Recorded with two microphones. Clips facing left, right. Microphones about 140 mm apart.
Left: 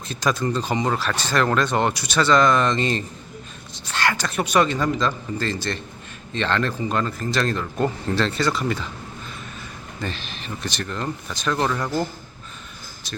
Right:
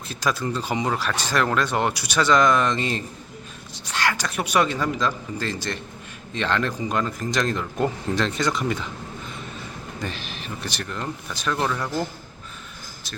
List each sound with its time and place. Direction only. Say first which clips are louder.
0.1 s a woman's voice: left 3 dB; 5° right (ahead or behind)
10.0 s speech: left 2 dB; 10° right (ahead or behind)